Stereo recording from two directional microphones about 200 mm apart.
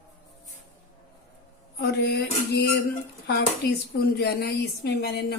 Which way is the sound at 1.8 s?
55° left (ahead or behind).